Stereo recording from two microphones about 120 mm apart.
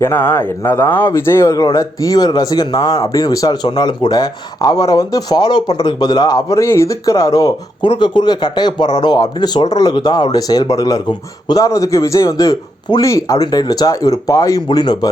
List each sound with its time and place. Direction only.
0.0 s speech: 20° left (ahead or behind); by 15.1 s 35° left (ahead or behind)